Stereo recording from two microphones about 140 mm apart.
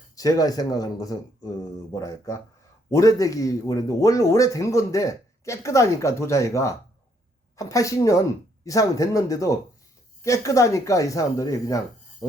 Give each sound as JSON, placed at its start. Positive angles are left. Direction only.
{"t": 0.2, "sound": "a man's voice", "side_deg": 25}